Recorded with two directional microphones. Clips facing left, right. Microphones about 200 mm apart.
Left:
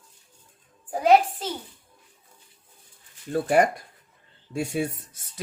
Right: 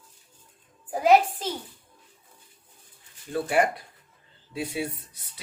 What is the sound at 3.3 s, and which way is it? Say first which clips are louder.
Speech: left 3 dB; 45° left (ahead or behind).